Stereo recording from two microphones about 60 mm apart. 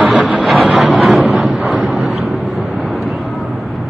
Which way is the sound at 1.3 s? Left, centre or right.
Centre.